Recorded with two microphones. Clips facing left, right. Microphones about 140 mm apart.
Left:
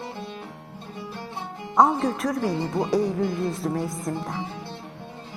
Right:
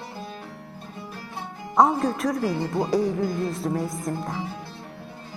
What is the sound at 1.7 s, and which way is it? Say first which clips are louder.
Speech: even; centre (ahead or behind).